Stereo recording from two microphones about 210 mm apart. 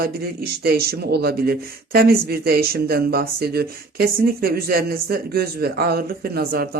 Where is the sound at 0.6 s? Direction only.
50° right (ahead or behind).